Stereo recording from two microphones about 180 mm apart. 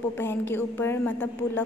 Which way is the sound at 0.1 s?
10° left (ahead or behind).